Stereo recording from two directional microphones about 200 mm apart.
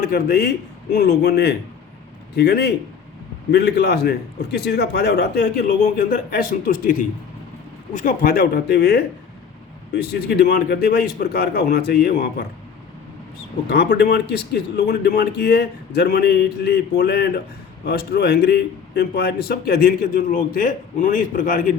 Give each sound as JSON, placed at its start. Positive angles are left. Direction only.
{"t": 0.0, "sound": "a man's voice", "side_deg": 50}
{"t": 13.7, "sound": "a man's voice", "side_deg": 55}